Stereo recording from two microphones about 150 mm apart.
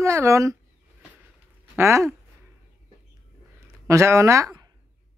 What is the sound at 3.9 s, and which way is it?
Speech, 20° right (ahead or behind).